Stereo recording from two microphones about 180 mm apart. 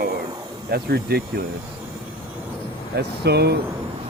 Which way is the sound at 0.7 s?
55° right (ahead or behind).